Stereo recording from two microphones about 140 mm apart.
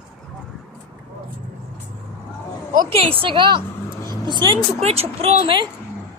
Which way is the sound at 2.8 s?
40° right (ahead or behind).